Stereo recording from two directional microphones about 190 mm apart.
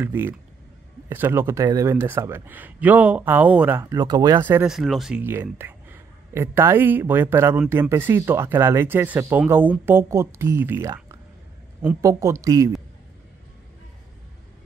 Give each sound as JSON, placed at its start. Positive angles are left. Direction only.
{"t": 0.0, "sound": "a man's voice", "side_deg": -10}